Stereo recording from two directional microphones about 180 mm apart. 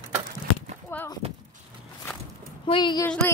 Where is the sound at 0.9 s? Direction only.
10° left (ahead or behind).